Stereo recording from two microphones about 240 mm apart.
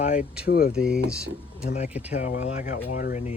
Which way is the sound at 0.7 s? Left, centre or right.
Centre.